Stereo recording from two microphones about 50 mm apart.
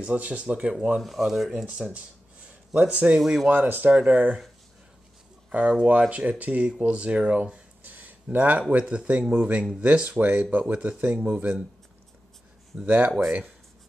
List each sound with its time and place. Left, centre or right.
0.0 s speech: right
1.0 s speech: centre
2.7 s speech: right
3.4 s speech: right
3.9 s speech: right
5.5 s speech: right
8.8 s speech: right
12.8 s speech: right